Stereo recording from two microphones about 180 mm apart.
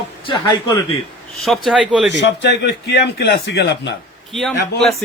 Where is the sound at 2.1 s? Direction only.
75° left (ahead or behind).